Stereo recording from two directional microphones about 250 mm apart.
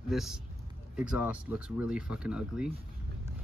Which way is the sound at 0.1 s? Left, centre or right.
Centre.